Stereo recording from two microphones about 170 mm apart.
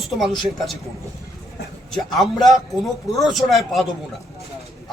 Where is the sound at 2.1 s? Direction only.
Centre (ahead or behind).